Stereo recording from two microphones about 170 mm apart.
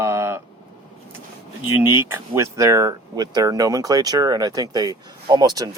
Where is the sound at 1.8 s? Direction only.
15° right (ahead or behind).